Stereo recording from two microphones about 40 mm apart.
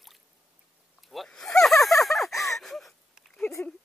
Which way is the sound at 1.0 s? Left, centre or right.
Centre.